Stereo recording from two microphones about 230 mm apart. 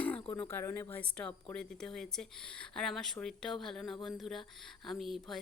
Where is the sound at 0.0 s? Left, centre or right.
Centre.